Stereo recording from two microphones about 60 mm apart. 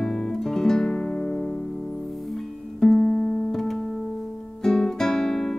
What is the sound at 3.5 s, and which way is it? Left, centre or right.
Music, centre.